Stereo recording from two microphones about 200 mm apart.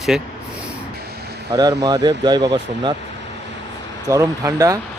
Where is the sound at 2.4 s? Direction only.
60° right (ahead or behind).